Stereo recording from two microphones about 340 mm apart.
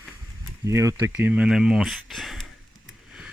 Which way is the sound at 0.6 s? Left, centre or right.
Centre.